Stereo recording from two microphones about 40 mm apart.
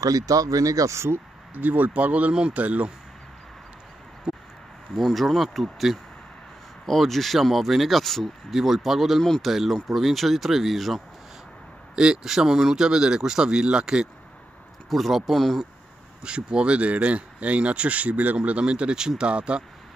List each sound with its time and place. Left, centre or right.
1.5 s speech: right
4.3 s a sound: right
4.9 s speech: centre
8.5 s speech: centre
11.9 s speech: right
14.9 s speech: centre
16.2 s speech: right